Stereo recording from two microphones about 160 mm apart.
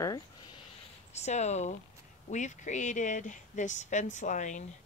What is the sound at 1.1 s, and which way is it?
Speech, 45° left (ahead or behind).